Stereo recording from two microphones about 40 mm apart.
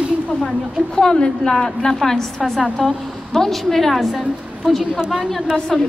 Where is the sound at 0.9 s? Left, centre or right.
Centre.